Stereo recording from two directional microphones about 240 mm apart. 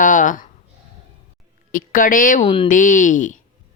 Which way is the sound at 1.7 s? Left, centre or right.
Left.